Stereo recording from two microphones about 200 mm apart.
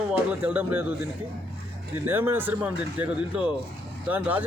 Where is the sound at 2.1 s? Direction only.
10° right (ahead or behind).